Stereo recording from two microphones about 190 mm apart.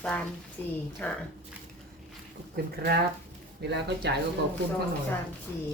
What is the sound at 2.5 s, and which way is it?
Speech, 55° right (ahead or behind).